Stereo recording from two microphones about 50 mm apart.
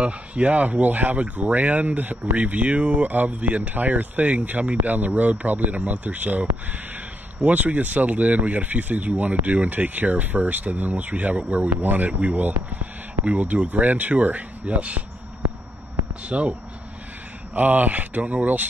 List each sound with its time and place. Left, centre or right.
0.0 s speech: right
16.3 s speech: right
17.6 s speech: right